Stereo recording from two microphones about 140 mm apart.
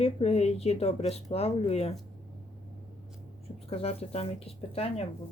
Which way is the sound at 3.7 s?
45° left (ahead or behind).